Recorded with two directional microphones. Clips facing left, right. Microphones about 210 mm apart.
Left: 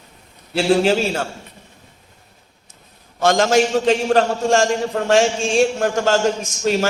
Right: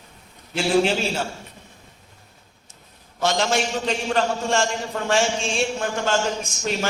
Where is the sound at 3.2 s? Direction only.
50° left (ahead or behind).